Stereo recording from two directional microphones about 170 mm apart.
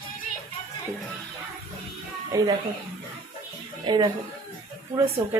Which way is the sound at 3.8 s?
25° right (ahead or behind).